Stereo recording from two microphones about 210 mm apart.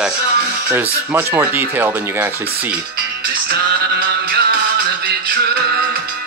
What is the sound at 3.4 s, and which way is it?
Music, 50° right (ahead or behind).